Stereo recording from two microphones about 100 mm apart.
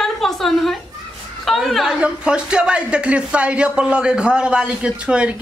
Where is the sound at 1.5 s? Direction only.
Centre (ahead or behind).